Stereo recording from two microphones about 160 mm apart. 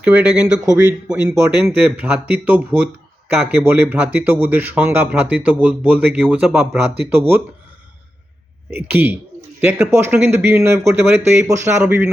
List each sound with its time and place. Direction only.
0.0 s speech: 10° right (ahead or behind)
0.4 s speech: 20° right (ahead or behind)
1.0 s speech: 5° right (ahead or behind)
8.7 s speech: 10° right (ahead or behind)